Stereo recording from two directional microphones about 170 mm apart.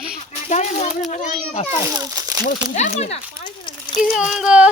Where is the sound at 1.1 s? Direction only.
45° left (ahead or behind).